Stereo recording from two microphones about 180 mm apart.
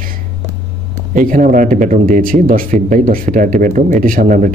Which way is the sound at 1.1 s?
50° right (ahead or behind).